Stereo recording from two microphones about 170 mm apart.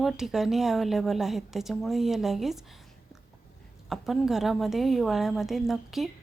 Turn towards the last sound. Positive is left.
turn(degrees=0)  # may be behind; listen again after turning